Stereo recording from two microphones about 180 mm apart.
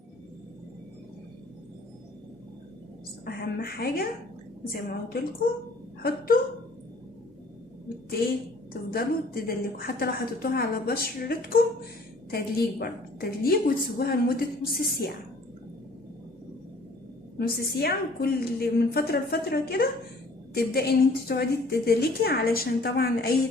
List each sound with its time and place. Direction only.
3.2 s a woman's voice: 60° left (ahead or behind)
8.7 s a woman's voice: 55° left (ahead or behind)
17.3 s a woman's voice: 60° left (ahead or behind)